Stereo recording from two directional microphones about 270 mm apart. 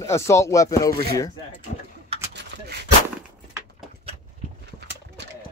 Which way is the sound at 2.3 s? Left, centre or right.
Right.